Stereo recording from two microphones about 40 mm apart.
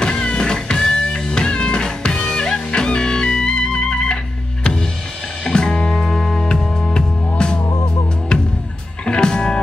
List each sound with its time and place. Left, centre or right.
0.0 s music: left
5.4 s music: centre
9.0 s music: left